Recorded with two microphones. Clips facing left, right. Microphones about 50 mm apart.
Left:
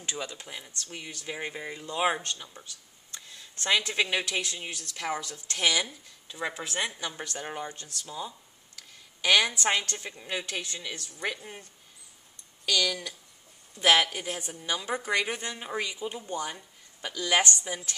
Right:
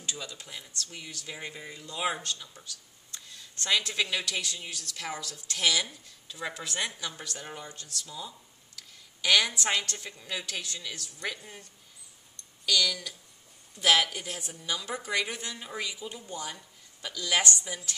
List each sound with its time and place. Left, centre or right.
0.0 s speech: left
3.2 s a sound: left
3.9 s speech: left
4.9 s speech: centre
9.2 s a woman's voice: centre
9.9 s speech: left
10.5 s speech: centre
12.6 s speech: left
15.5 s speech: left